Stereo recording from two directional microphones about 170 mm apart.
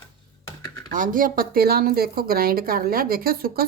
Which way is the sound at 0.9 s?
55° right (ahead or behind).